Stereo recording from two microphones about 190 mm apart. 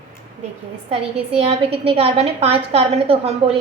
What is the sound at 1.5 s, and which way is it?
A woman's voice, 30° right (ahead or behind).